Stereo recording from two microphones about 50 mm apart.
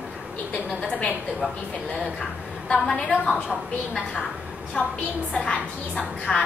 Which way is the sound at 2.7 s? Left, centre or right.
Centre.